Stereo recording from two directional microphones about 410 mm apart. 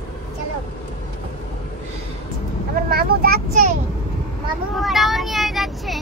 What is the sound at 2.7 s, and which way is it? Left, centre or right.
Speech, right.